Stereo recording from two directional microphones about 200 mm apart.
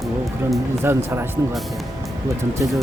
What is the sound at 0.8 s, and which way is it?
Speech, 10° right (ahead or behind).